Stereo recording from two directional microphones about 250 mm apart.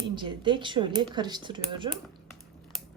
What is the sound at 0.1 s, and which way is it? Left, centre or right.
Speech, centre.